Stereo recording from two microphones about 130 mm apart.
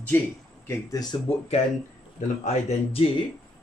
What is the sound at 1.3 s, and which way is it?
Speech, 50° left (ahead or behind).